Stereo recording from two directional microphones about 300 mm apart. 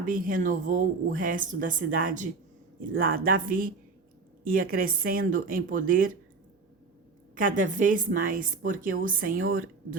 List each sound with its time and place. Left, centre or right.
0.0 s a woman's voice: right
7.3 s a woman's voice: right